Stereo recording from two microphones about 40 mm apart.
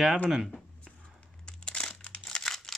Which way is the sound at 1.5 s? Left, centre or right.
Left.